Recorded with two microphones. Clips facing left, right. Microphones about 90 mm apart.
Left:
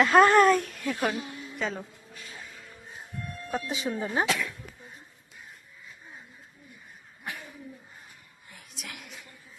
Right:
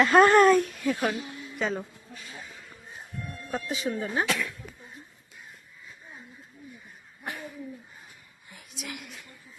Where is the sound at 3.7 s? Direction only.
25° left (ahead or behind).